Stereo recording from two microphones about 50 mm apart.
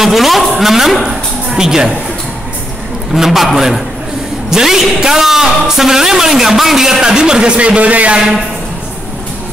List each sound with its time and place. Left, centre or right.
0.0 s a woman's voice: centre
3.1 s a man's voice: centre; by 8.2 s right